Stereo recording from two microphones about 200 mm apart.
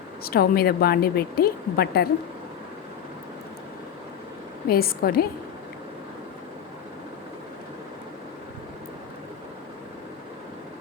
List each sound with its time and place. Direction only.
0.2 s a woman's voice: 50° left (ahead or behind)
4.7 s a woman's voice: 50° left (ahead or behind)